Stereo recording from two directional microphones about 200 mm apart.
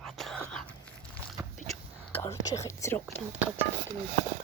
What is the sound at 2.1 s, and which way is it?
Speech, 15° left (ahead or behind).